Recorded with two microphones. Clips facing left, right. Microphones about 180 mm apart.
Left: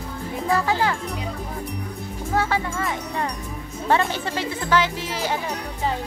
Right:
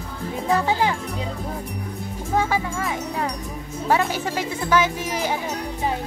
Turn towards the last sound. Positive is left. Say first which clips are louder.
# right 1 dB
turn(degrees=-15)  # may be behind; listen again after turning